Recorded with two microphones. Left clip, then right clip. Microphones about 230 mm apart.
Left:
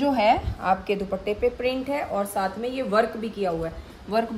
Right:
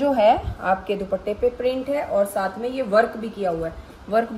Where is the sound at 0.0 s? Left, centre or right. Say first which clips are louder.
Right 3 dB; left.